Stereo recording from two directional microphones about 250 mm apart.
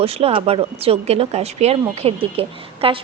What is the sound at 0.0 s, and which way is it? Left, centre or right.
Speech, right.